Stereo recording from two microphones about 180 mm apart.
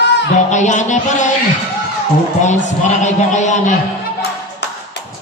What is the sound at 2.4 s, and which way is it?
A man's voice, 40° left (ahead or behind).